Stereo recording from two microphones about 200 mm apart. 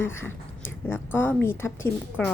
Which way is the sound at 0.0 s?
10° left (ahead or behind).